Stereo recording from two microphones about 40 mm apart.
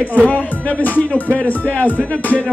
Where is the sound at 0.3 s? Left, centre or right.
Left.